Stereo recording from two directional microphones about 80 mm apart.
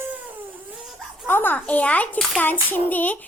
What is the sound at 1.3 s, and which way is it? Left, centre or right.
Speech, left.